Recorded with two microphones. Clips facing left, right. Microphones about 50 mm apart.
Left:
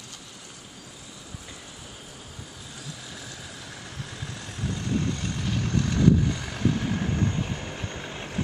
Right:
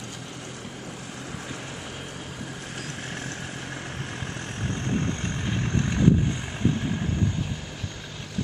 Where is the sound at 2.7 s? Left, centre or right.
Right; by 6.8 s centre.